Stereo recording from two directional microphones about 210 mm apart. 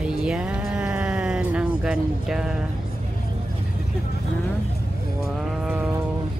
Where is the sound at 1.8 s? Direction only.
5° right (ahead or behind).